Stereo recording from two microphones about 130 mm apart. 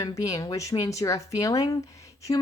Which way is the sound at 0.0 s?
25° left (ahead or behind).